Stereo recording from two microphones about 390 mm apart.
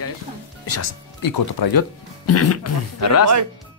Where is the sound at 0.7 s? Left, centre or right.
Left.